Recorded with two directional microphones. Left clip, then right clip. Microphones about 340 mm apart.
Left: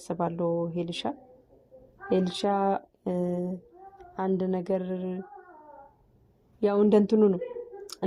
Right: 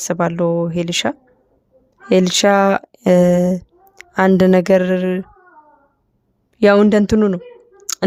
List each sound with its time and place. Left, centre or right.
0.0 s speech: right
3.1 s speech: right
4.3 s speech: right
6.6 s clicking: right